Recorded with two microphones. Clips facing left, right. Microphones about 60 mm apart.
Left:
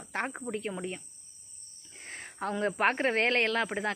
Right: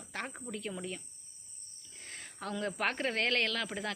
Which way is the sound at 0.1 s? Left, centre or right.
Left.